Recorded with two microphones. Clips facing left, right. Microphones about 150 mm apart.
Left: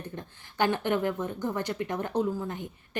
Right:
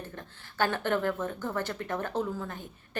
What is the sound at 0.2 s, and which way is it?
A woman's voice, 15° left (ahead or behind).